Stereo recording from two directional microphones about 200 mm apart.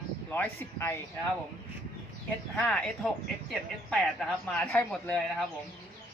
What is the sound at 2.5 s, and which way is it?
Speech, 5° left (ahead or behind).